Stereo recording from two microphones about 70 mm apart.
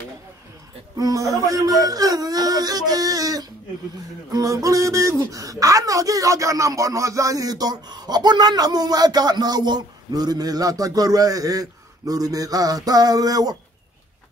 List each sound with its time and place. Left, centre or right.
0.9 s speech: right
4.3 s a sound: right
5.3 s speech: right